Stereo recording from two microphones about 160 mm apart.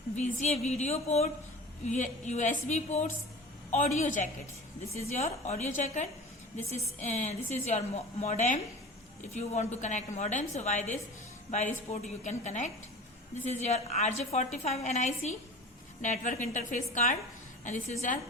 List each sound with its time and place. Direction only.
0.2 s a woman's voice: 50° left (ahead or behind)